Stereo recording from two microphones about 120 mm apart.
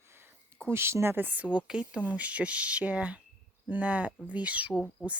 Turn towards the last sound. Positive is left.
turn(degrees=10)  # may be behind; listen again after turning